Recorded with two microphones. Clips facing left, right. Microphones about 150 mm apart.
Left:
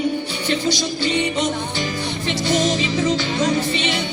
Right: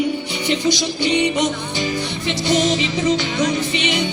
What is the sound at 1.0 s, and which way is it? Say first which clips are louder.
Music: right 4 dB; 15° right (ahead or behind).